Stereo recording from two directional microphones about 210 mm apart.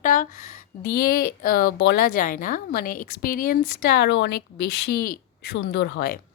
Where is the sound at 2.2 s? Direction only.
40° left (ahead or behind).